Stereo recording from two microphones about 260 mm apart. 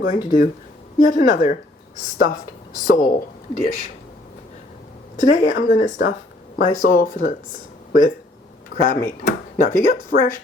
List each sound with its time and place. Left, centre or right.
0.0 s speech: left
2.8 s speech: left
5.2 s speech: left
8.8 s speech: left